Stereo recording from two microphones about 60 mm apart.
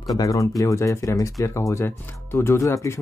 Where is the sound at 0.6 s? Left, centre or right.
Left.